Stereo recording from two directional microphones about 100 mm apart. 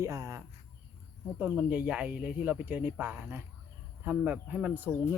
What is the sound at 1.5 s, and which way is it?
Speech, 15° right (ahead or behind).